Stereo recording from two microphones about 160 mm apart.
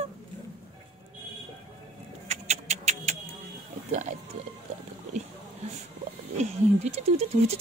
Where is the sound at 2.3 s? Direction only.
45° right (ahead or behind).